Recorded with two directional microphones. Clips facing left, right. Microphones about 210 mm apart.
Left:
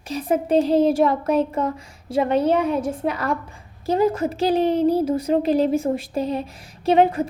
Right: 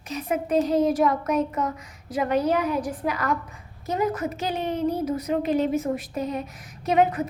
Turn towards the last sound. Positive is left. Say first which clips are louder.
# left 4 dB
turn(degrees=30)  # may be behind; listen again after turning